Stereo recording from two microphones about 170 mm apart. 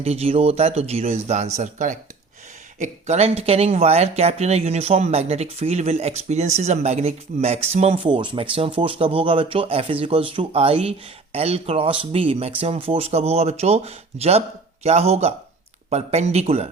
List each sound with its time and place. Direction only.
0.0 s speech: 35° right (ahead or behind)